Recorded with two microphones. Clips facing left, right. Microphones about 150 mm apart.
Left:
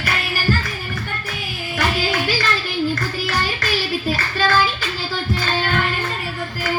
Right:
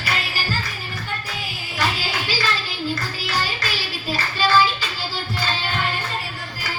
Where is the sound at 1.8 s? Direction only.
50° left (ahead or behind).